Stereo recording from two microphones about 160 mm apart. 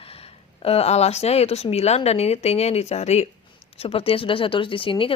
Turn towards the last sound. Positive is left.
turn(degrees=30)  # may be behind; listen again after turning